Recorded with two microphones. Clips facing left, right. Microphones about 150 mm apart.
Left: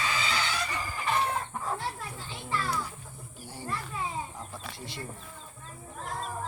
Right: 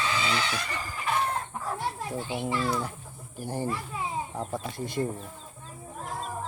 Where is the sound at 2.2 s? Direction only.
65° right (ahead or behind).